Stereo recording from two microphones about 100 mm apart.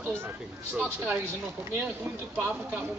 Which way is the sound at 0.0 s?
25° right (ahead or behind).